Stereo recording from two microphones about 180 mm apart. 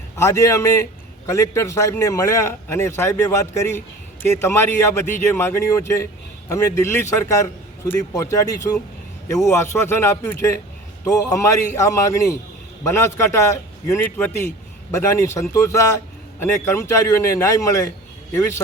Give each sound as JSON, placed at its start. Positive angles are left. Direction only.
{"t": 0.2, "sound": "a man's voice", "side_deg": 15}